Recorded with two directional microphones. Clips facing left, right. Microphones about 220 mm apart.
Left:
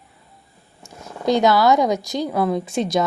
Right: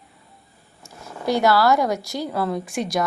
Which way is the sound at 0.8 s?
20° left (ahead or behind).